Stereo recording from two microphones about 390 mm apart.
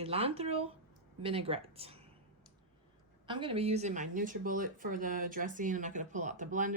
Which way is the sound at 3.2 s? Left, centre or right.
Centre.